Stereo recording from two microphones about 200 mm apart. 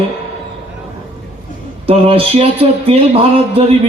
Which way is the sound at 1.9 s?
30° right (ahead or behind).